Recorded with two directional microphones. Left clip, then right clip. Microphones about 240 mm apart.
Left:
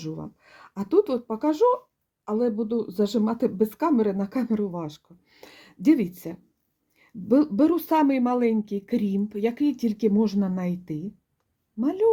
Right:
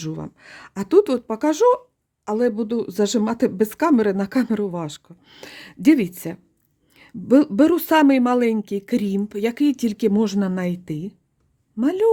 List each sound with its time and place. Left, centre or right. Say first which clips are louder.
0.0 s a woman's voice: right 4 dB; right